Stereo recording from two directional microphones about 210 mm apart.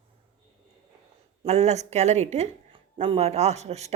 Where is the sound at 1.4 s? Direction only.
30° right (ahead or behind).